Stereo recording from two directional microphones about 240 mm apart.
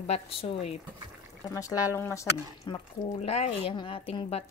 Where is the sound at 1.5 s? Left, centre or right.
Centre.